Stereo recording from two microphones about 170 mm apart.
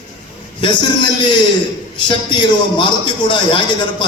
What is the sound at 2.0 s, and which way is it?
A man's voice, 30° left (ahead or behind).